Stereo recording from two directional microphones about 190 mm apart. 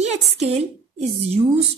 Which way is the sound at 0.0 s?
35° right (ahead or behind).